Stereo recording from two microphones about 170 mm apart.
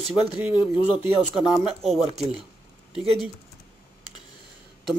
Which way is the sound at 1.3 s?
5° right (ahead or behind).